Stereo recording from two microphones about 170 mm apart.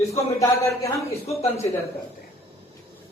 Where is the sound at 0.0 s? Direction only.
20° left (ahead or behind).